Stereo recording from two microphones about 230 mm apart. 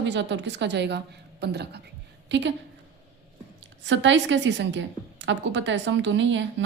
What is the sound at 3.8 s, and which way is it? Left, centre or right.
A woman's voice, right.